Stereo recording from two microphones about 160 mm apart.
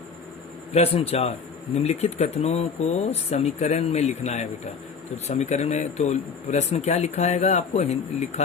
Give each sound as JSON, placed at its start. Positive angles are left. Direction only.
{"t": 0.7, "sound": "speech", "side_deg": 35}